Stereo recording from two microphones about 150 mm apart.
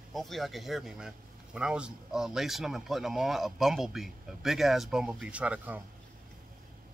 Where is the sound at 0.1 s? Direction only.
Centre (ahead or behind).